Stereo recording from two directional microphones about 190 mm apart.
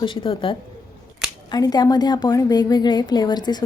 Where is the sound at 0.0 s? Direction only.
25° left (ahead or behind).